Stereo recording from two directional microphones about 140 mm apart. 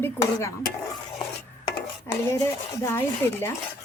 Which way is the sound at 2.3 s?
25° left (ahead or behind).